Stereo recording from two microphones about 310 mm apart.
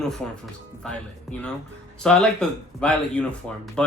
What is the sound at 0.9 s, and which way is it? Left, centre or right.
Chuckle, centre.